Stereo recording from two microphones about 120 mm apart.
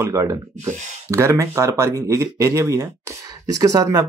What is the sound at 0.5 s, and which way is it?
Speech, 85° right.